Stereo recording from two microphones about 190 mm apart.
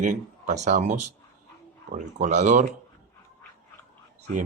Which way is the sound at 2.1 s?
40° right (ahead or behind).